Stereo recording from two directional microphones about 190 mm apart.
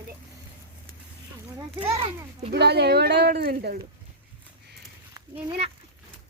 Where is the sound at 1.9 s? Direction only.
30° right (ahead or behind).